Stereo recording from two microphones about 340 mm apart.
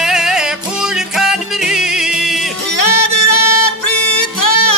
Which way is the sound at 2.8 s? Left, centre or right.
Left.